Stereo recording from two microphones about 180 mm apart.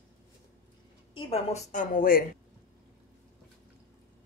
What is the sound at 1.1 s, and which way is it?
A woman's voice, 35° left (ahead or behind).